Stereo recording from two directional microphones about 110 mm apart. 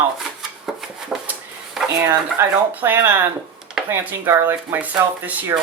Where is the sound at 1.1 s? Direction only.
5° right (ahead or behind).